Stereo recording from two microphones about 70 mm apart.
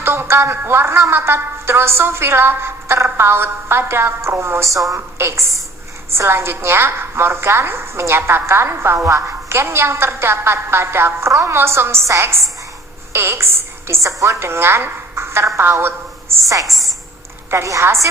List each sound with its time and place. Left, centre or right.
0.0 s a sound: right
0.5 s a woman's voice: right
11.3 s a woman's voice: right
11.5 s a woman's voice: right
17.5 s a woman's voice: right